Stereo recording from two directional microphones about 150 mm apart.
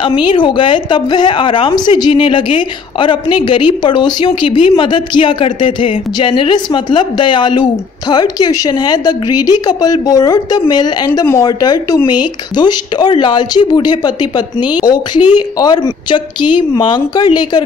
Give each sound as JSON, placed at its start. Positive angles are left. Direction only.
{"t": 0.0, "sound": "a woman's voice", "side_deg": 35}